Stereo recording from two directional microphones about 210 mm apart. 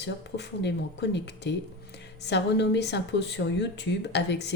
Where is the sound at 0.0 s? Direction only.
55° left (ahead or behind).